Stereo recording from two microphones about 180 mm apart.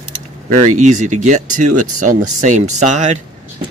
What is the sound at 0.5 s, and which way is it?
Speech, 40° right (ahead or behind).